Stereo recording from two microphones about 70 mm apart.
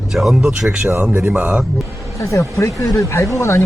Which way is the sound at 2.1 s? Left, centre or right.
Left.